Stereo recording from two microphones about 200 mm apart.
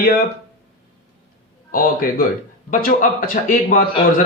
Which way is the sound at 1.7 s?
45° left (ahead or behind).